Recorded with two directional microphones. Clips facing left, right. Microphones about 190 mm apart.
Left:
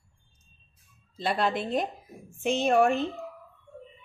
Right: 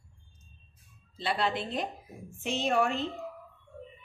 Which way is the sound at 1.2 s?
45° left (ahead or behind).